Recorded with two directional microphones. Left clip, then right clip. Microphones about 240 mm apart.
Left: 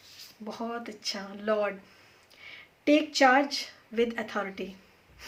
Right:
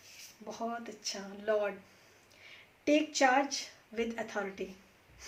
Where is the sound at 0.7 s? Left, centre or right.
Left.